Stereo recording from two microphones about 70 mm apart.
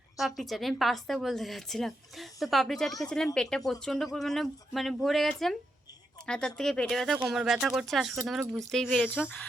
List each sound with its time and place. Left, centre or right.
0.2 s a woman's voice: centre